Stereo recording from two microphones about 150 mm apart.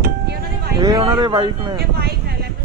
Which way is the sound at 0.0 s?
90° right.